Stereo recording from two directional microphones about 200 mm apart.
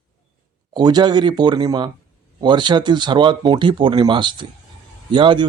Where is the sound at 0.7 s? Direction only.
20° right (ahead or behind).